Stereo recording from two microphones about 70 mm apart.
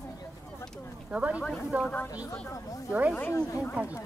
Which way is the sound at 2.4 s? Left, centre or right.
Left.